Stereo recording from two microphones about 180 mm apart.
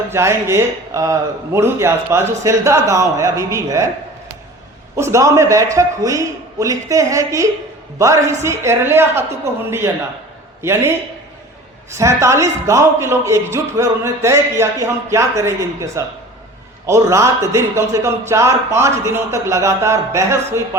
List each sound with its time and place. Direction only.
0.1 s speech: 15° right (ahead or behind)
4.9 s speech: 15° right (ahead or behind)
11.9 s speech: 15° right (ahead or behind)